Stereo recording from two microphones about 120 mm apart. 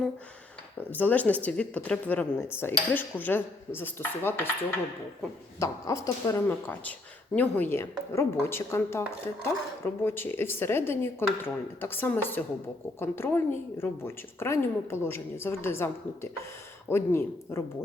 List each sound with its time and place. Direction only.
0.8 s speech: 15° left (ahead or behind)
5.5 s speech: 25° left (ahead or behind)